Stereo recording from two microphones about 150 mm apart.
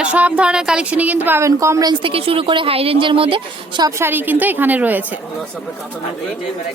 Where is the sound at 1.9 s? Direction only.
35° right (ahead or behind).